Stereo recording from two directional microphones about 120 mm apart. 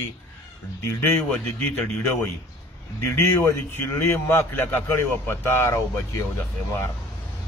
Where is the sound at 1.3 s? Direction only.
10° left (ahead or behind).